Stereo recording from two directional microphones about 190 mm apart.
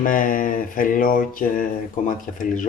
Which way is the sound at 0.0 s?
45° left (ahead or behind).